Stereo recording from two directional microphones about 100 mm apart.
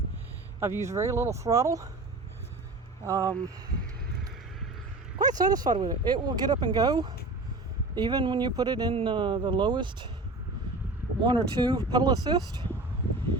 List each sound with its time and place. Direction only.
0.6 s speech: 25° right (ahead or behind)
3.1 s speech: 35° right (ahead or behind)
5.1 s speech: 40° right (ahead or behind)
8.9 s speech: 60° right (ahead or behind)
11.2 s speech: 45° right (ahead or behind)